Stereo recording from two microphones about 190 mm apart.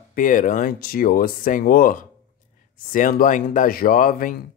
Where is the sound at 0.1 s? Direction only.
45° left (ahead or behind).